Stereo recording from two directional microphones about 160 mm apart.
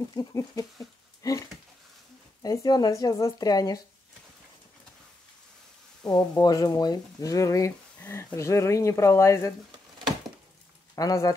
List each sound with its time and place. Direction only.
0.1 s speech: 20° left (ahead or behind)
2.4 s speech: 25° left (ahead or behind)
6.0 s speech: 25° left (ahead or behind)
11.0 s speech: 20° left (ahead or behind)